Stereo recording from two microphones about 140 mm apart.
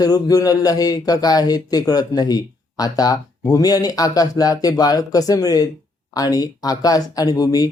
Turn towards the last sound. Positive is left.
turn(degrees=25)  # may be behind; listen again after turning